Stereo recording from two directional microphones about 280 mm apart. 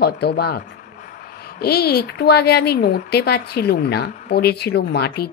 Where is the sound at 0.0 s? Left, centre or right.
Left.